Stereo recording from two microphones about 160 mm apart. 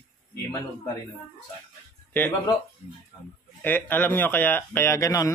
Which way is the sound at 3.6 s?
10° left (ahead or behind).